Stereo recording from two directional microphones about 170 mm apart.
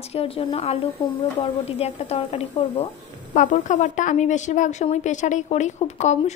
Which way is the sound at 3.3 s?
50° left (ahead or behind).